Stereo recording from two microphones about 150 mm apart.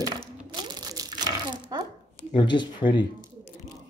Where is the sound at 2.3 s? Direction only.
30° left (ahead or behind).